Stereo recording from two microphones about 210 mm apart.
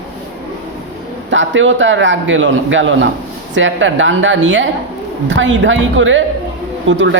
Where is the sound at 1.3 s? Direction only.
60° right (ahead or behind).